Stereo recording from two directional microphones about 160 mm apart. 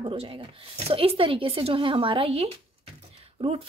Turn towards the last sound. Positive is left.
turn(degrees=-40)  # may be behind; listen again after turning